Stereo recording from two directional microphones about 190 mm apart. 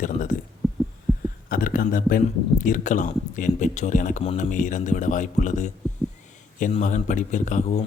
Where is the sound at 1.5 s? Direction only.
50° left (ahead or behind).